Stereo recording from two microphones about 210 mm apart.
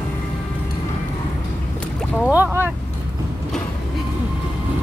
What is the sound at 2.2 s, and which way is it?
Speech, 5° right (ahead or behind).